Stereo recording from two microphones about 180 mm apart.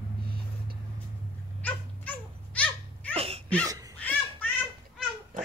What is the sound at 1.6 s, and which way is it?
Dog, 10° left (ahead or behind).